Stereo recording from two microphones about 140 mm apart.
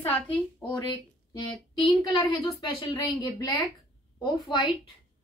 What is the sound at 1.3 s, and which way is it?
A woman's voice, 35° left (ahead or behind).